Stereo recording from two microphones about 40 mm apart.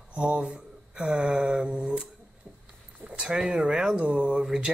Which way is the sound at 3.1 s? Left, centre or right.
Right.